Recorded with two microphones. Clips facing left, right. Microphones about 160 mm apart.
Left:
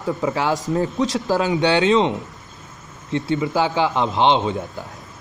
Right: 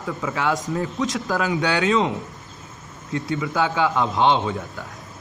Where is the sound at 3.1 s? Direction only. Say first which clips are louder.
Left 3 dB; 25° left (ahead or behind).